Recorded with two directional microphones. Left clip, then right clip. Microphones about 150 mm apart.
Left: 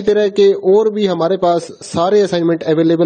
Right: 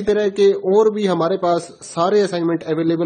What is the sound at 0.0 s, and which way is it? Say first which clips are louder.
Speech: left 4 dB; 40° left (ahead or behind).